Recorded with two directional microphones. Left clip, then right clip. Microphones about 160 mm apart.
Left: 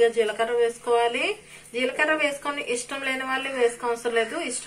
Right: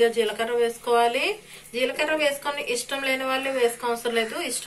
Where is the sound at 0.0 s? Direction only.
10° left (ahead or behind).